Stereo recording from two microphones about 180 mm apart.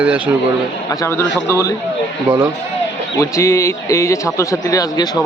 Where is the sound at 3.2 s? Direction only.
15° left (ahead or behind).